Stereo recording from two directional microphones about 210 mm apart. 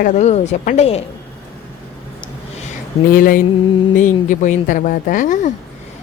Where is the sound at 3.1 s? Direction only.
40° left (ahead or behind).